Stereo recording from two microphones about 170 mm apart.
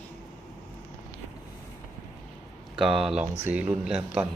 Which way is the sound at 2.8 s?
Centre (ahead or behind).